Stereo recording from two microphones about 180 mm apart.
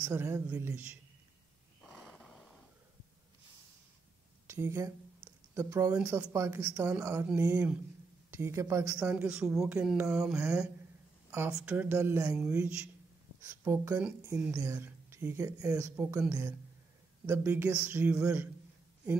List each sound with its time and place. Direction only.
0.0 s speech: 15° right (ahead or behind)
1.8 s snort: 5° left (ahead or behind)
4.5 s a sound: 15° right (ahead or behind)
5.9 s speech: 10° right (ahead or behind)
10.4 s speech: 15° right (ahead or behind)
13.4 s speech: 15° right (ahead or behind)